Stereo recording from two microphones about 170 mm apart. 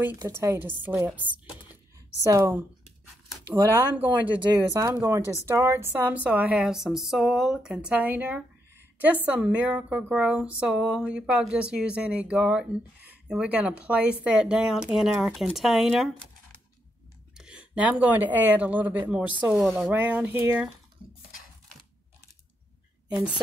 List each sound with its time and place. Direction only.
0.2 s a woman's voice: 15° right (ahead or behind)
4.2 s a woman's voice: 30° right (ahead or behind); by 20.6 s 15° right (ahead or behind)
23.0 s a woman's voice: 10° right (ahead or behind)